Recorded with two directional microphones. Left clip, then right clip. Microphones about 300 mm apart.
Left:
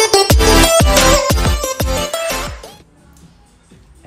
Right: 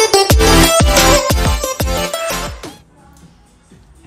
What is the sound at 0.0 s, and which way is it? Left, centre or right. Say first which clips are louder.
Music: right 1 dB; centre.